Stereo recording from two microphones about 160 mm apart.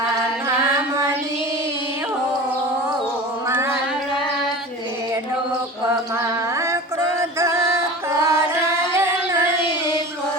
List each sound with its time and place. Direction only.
7.2 s music: 15° right (ahead or behind)